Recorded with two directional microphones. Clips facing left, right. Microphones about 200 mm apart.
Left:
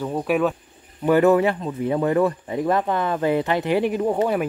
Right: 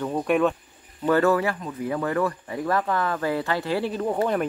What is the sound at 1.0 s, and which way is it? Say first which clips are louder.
Speech: left 4 dB; 15° left (ahead or behind).